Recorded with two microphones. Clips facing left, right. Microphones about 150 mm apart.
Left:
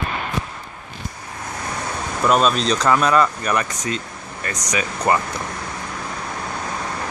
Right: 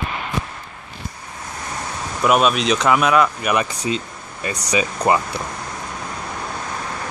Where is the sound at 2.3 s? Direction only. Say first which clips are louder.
Right 1 dB; 10° right (ahead or behind).